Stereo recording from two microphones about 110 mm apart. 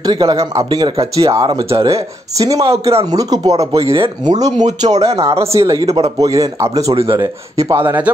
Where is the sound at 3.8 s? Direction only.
55° right (ahead or behind).